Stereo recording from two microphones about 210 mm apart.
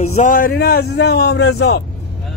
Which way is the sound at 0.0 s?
35° left (ahead or behind).